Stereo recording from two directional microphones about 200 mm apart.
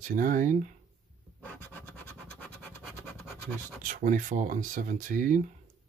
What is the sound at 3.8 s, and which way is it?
Speech, 40° right (ahead or behind).